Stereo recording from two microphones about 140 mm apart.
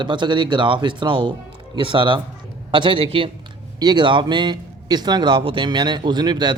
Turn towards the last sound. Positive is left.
turn(degrees=-30)  # may be behind; listen again after turning